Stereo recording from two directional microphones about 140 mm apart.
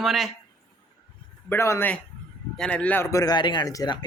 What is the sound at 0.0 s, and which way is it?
Speech, centre (ahead or behind).